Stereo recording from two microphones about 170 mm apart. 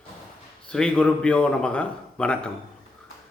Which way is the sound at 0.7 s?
5° left (ahead or behind).